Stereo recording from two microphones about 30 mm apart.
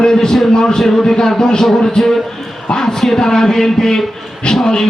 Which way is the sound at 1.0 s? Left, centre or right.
Left.